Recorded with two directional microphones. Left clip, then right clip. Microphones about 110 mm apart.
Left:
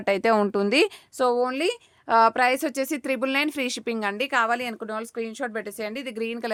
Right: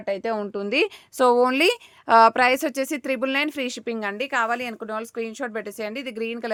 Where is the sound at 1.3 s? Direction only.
60° right (ahead or behind).